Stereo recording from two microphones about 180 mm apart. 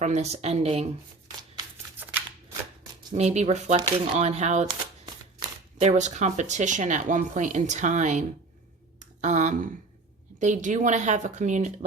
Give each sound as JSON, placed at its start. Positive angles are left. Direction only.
{"t": 0.0, "sound": "speech", "side_deg": -40}
{"t": 3.2, "sound": "speech", "side_deg": -35}
{"t": 9.0, "sound": "a sound", "side_deg": -40}
{"t": 10.4, "sound": "speech", "side_deg": -45}